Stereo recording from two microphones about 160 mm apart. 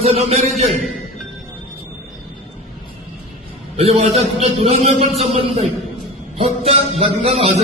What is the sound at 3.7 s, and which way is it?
A man's voice, 40° right (ahead or behind).